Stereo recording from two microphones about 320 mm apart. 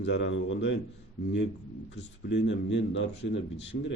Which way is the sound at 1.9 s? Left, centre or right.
Left.